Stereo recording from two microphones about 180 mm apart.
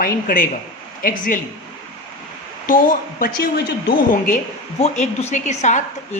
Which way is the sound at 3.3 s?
60° left (ahead or behind).